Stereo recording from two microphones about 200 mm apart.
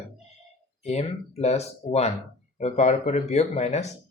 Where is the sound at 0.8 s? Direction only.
30° left (ahead or behind).